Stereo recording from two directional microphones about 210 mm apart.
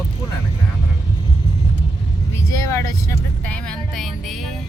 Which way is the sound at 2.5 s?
15° left (ahead or behind).